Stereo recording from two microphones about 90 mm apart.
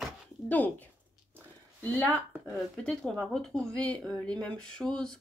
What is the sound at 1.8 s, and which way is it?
Speech, 20° left (ahead or behind).